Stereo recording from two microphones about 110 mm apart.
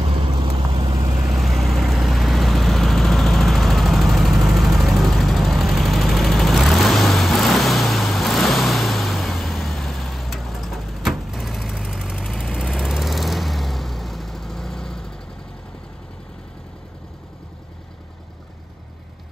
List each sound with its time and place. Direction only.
0.9 s vehicle: 30° right (ahead or behind)
1.3 s vehicle: centre (ahead or behind)